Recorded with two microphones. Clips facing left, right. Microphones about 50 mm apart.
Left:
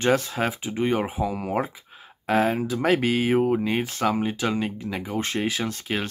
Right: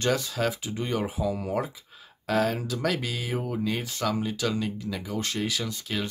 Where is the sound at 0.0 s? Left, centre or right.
Left.